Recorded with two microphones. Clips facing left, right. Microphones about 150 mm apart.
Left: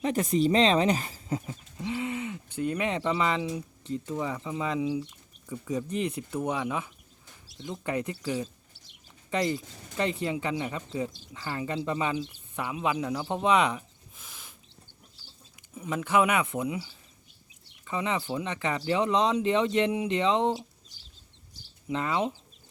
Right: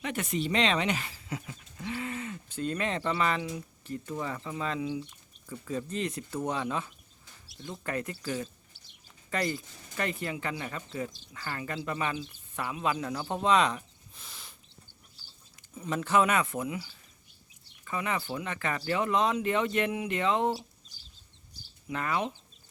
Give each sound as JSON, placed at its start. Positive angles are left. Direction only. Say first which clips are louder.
{"t": 0.0, "sound": "speech", "louder": "left 7 dB", "side_deg": 35}
{"t": 1.9, "sound": "a sound", "louder": "left 4 dB", "side_deg": 20}
{"t": 2.6, "sound": "speech", "louder": "left 3 dB", "side_deg": 15}
{"t": 15.7, "sound": "speech", "louder": "left 1 dB", "side_deg": 10}
{"t": 21.8, "sound": "speech", "louder": "left 3 dB", "side_deg": 20}